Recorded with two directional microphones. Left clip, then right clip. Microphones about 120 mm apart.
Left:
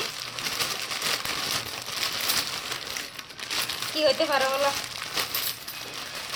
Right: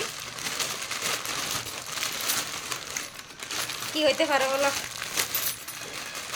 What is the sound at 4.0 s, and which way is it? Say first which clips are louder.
Speech: left 1 dB; 35° right (ahead or behind).